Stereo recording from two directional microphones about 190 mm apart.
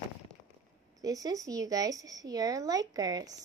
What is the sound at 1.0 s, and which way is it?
A woman's voice, 20° right (ahead or behind).